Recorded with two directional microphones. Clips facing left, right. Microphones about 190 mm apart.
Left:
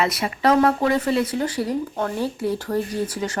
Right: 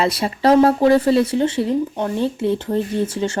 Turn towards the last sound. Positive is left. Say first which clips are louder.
# right 5 dB
turn(degrees=-25)  # may be behind; listen again after turning